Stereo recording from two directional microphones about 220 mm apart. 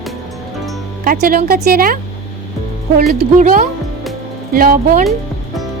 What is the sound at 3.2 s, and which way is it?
Speech, 40° right (ahead or behind).